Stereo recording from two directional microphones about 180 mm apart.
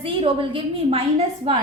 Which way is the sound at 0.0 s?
30° right (ahead or behind).